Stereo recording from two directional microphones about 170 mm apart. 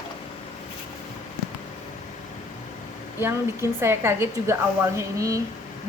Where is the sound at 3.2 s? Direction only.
15° right (ahead or behind).